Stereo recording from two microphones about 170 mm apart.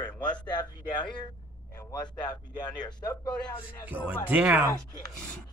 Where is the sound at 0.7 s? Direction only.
25° left (ahead or behind).